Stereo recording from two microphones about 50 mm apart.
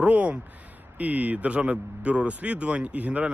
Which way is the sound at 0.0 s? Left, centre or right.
Right.